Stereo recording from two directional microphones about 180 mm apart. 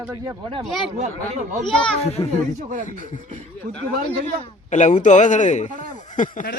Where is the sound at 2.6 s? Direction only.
45° right (ahead or behind).